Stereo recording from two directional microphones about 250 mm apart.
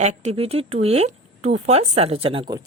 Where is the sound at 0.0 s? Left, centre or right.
Right.